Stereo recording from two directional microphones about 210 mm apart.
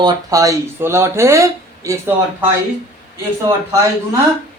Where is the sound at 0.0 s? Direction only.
15° right (ahead or behind).